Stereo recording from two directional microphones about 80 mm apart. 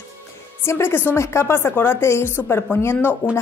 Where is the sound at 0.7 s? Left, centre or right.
Left.